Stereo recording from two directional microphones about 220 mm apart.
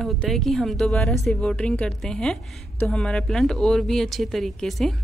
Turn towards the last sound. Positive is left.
turn(degrees=0)  # may be behind; listen again after turning